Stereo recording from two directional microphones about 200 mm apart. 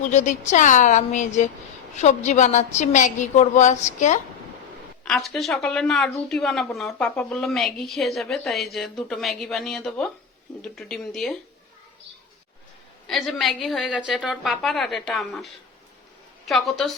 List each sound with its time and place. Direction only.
0.0 s a woman's voice: 35° left (ahead or behind)
5.0 s speech: 5° left (ahead or behind)
13.1 s speech: centre (ahead or behind)
16.5 s speech: centre (ahead or behind)